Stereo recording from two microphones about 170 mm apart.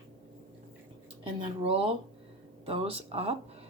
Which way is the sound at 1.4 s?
35° right (ahead or behind).